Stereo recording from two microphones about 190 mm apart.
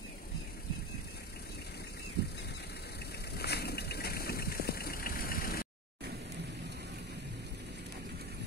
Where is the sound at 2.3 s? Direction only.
60° left (ahead or behind).